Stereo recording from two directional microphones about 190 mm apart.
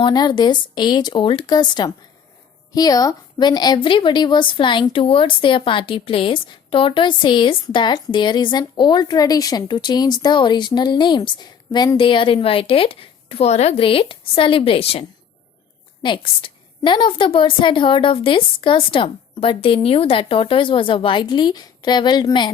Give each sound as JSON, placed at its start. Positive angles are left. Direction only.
{"t": 0.0, "sound": "a woman's voice", "side_deg": 20}
{"t": 16.0, "sound": "a woman's voice", "side_deg": 25}